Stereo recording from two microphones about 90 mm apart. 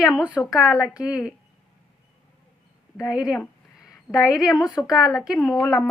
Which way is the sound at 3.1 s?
10° right (ahead or behind).